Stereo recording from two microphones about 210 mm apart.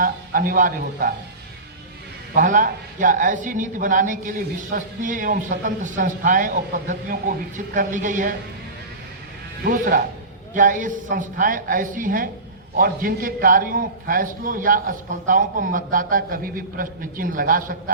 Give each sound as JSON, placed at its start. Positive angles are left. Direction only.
{"t": 0.0, "sound": "speech", "side_deg": -40}
{"t": 2.3, "sound": "speech", "side_deg": -40}
{"t": 9.6, "sound": "speech", "side_deg": -40}